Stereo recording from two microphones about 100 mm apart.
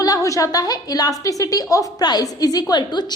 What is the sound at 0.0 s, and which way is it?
A woman's voice, 35° left (ahead or behind).